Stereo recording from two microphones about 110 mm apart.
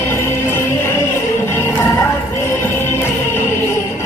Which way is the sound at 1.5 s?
20° left (ahead or behind).